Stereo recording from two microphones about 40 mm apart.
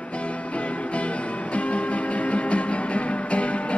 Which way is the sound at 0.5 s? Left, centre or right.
Left.